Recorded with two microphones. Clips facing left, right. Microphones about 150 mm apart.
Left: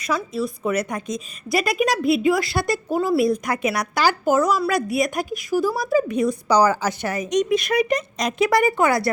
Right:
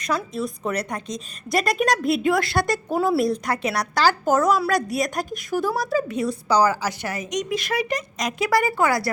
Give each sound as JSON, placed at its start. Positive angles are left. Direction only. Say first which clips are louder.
{"t": 0.0, "sound": "a woman's voice", "louder": "left 1 dB", "side_deg": 0}
{"t": 6.0, "sound": "a woman's voice", "louder": "left 4 dB", "side_deg": 15}